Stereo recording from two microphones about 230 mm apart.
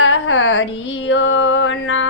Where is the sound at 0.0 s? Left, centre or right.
Left.